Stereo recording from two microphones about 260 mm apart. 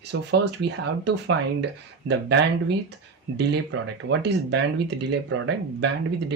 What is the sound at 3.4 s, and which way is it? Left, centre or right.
Speech, right.